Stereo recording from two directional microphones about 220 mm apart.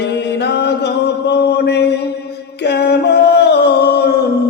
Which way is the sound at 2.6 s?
50° left (ahead or behind).